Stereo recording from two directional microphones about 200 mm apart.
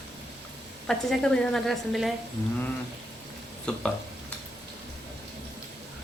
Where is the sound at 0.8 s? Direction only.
Centre (ahead or behind).